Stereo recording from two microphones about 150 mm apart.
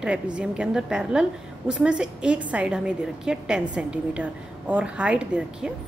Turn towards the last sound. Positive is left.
turn(degrees=-5)  # may be behind; listen again after turning